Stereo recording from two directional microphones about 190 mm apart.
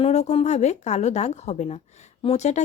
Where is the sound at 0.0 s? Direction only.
35° left (ahead or behind).